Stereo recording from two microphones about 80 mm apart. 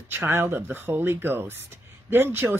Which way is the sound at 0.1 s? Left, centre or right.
Right.